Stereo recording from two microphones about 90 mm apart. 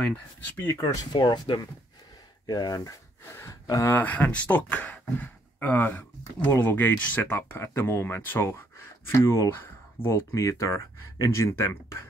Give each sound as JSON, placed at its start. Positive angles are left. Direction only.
{"t": 0.7, "sound": "speech", "side_deg": 35}
{"t": 1.1, "sound": "speech", "side_deg": 55}
{"t": 3.9, "sound": "speech", "side_deg": 20}